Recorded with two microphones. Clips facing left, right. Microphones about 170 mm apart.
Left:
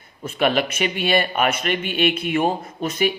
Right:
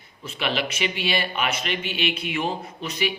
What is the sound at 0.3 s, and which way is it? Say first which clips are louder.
A man's voice: left 7 dB; 50° left (ahead or behind).